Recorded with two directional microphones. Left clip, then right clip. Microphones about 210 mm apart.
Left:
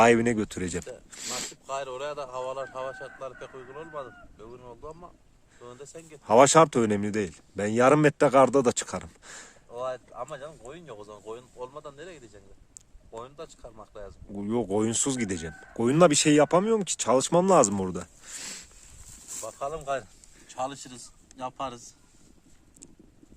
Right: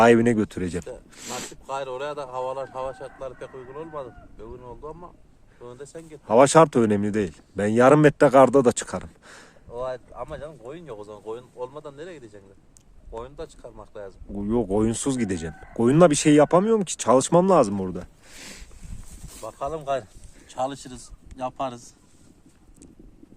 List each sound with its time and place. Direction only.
0.0 s speech: 5° left (ahead or behind)
1.1 s a sound: centre (ahead or behind)
1.6 s speech: 20° right (ahead or behind)
6.2 s speech: 10° left (ahead or behind)
9.7 s speech: 15° right (ahead or behind)
14.3 s speech: 5° left (ahead or behind)
17.5 s speech: 20° left (ahead or behind)
19.5 s a man's voice: 30° right (ahead or behind)